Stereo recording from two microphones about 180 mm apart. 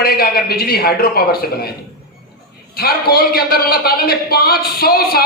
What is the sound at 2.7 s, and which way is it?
A man's voice, 55° left (ahead or behind).